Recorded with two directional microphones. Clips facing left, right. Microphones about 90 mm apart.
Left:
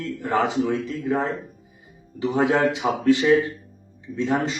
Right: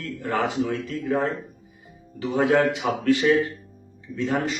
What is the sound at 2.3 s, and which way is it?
A man's voice, 20° left (ahead or behind).